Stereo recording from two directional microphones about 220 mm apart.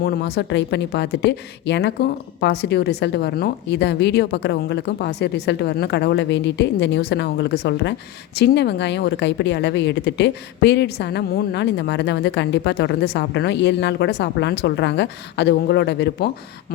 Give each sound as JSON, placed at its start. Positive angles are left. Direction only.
{"t": 0.0, "sound": "a woman's voice", "side_deg": 45}